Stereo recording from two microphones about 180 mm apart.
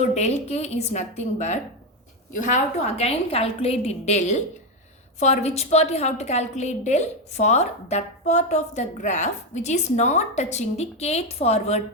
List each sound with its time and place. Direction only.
0.0 s a woman's voice: 40° left (ahead or behind)